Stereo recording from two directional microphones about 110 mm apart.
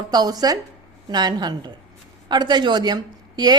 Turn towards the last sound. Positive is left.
turn(degrees=-40)  # may be behind; listen again after turning